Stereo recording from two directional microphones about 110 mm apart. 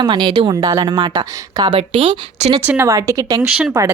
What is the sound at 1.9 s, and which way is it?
Speech, 70° right (ahead or behind).